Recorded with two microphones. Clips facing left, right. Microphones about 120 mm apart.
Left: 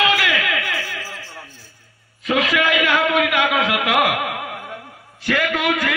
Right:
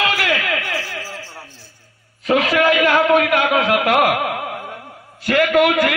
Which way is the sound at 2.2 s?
35° right (ahead or behind).